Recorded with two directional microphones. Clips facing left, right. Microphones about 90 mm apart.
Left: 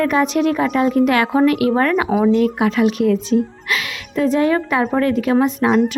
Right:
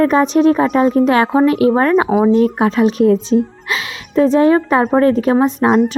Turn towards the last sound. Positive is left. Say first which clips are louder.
# right 3 dB
turn(degrees=-35)  # may be behind; listen again after turning